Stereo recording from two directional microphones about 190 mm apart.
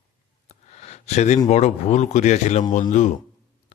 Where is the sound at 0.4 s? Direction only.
35° left (ahead or behind).